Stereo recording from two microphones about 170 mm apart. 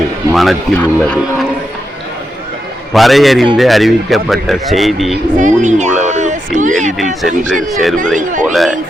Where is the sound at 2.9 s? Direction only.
Centre (ahead or behind).